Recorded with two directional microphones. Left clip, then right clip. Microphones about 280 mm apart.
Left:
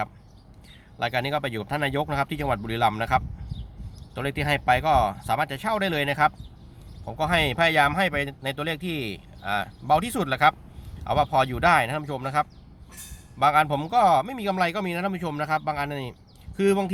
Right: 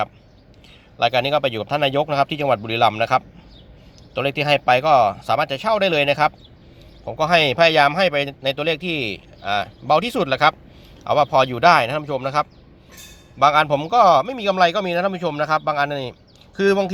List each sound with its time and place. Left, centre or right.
0.9 s speech: centre